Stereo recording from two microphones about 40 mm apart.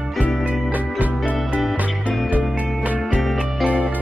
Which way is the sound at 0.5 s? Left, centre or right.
Right.